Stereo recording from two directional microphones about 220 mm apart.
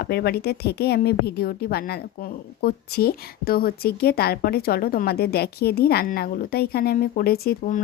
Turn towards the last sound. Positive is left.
turn(degrees=40)  # may be behind; listen again after turning